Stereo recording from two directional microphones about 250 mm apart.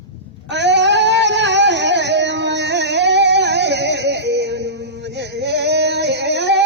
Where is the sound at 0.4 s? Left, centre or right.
Right.